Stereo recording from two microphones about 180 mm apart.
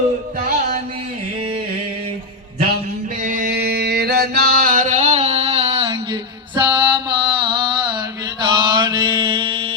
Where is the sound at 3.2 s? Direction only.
50° right (ahead or behind); by 6.1 s 25° right (ahead or behind).